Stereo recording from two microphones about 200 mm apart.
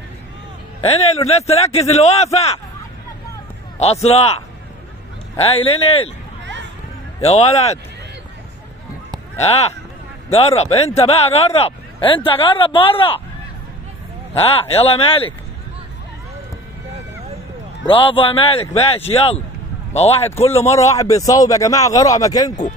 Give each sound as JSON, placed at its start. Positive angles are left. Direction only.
{"t": 0.7, "sound": "a man's voice", "side_deg": 30}
{"t": 3.8, "sound": "a man's voice", "side_deg": 30}
{"t": 5.4, "sound": "speech", "side_deg": 30}
{"t": 7.2, "sound": "a man's voice", "side_deg": 35}
{"t": 9.4, "sound": "a man's voice", "side_deg": 30}
{"t": 14.4, "sound": "speech", "side_deg": 30}
{"t": 17.8, "sound": "a man's voice", "side_deg": 25}
{"t": 20.7, "sound": "a man's voice", "side_deg": 15}